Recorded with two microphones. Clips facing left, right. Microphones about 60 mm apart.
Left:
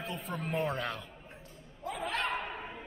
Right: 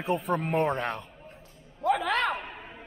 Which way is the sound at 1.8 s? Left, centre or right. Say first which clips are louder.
Right 11 dB; right.